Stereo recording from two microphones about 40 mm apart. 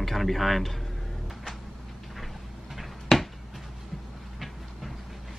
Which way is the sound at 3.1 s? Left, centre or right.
Centre.